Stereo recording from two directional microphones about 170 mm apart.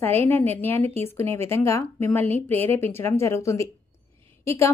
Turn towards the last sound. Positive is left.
turn(degrees=15)  # may be behind; listen again after turning